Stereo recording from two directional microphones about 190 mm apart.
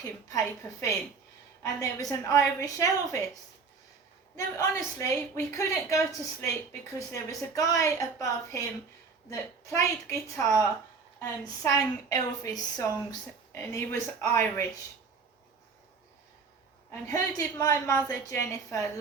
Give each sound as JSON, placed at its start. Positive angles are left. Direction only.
{"t": 0.3, "sound": "a woman's voice", "side_deg": 15}
{"t": 4.4, "sound": "a woman's voice", "side_deg": 15}
{"t": 16.9, "sound": "a woman's voice", "side_deg": 15}